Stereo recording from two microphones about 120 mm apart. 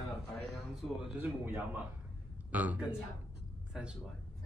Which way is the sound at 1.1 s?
15° right (ahead or behind).